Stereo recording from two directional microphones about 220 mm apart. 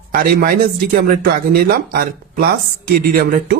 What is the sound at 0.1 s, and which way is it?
Speech, 40° right (ahead or behind).